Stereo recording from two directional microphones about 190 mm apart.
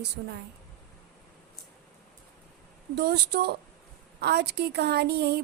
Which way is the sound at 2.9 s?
60° right (ahead or behind).